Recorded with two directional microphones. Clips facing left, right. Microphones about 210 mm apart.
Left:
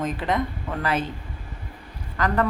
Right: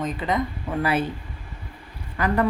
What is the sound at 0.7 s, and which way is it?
Speech, 10° right (ahead or behind).